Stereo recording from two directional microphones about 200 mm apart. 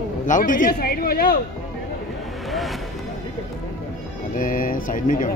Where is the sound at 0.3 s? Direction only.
40° left (ahead or behind).